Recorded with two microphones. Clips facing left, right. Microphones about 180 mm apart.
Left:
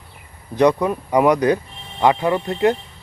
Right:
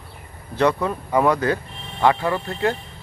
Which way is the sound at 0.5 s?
15° left (ahead or behind).